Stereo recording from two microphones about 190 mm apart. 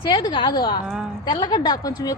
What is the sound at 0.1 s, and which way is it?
A woman's voice, 25° left (ahead or behind).